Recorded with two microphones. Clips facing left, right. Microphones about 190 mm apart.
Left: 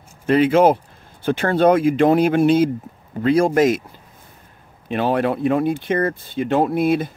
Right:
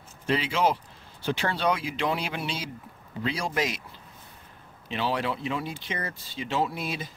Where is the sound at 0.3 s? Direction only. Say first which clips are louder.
Left 12 dB; 50° left (ahead or behind).